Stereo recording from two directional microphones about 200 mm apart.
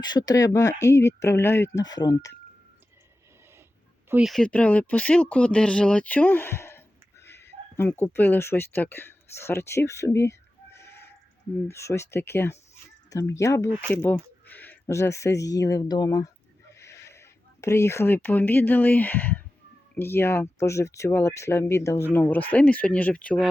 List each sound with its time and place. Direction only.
0.0 s speech: 20° left (ahead or behind)
4.1 s speech: centre (ahead or behind); by 16.3 s 20° left (ahead or behind)
16.7 s a sound: 15° left (ahead or behind)
20.0 s speech: 10° left (ahead or behind)